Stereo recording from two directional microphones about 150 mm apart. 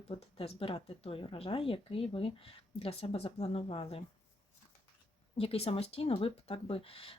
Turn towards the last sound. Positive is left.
turn(degrees=40)  # may be behind; listen again after turning